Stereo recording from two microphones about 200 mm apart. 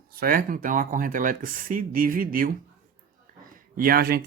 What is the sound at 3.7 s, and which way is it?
Speech, 45° right (ahead or behind).